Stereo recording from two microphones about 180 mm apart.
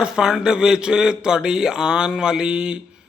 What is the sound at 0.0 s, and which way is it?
Speech, 5° right (ahead or behind).